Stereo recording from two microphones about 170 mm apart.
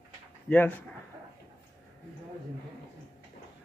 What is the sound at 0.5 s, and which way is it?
Speech, 10° left (ahead or behind).